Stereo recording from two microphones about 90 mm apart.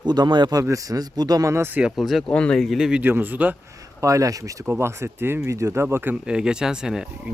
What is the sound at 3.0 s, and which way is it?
Speech, 20° right (ahead or behind).